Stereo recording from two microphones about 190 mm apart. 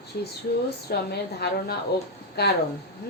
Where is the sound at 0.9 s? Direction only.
60° left (ahead or behind).